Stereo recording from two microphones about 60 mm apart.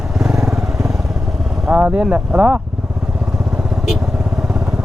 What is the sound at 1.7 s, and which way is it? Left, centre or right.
Vehicle, right.